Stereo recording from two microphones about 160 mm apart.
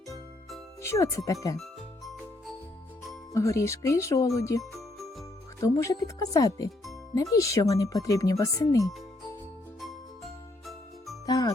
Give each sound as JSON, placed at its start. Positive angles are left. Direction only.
{"t": 0.8, "sound": "speech", "side_deg": 20}
{"t": 3.3, "sound": "speech", "side_deg": 20}
{"t": 4.7, "sound": "jingle", "side_deg": 0}
{"t": 5.5, "sound": "speech", "side_deg": 20}
{"t": 10.7, "sound": "jingle", "side_deg": 0}
{"t": 11.3, "sound": "jingle", "side_deg": 25}